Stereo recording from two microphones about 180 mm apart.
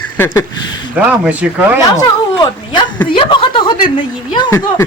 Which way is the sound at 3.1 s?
25° left (ahead or behind).